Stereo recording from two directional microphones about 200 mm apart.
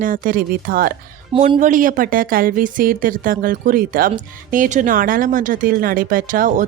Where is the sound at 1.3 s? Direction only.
25° right (ahead or behind).